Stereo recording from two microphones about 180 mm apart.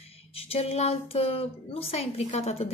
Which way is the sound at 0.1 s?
30° left (ahead or behind).